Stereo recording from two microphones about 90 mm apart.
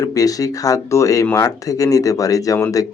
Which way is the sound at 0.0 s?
40° left (ahead or behind).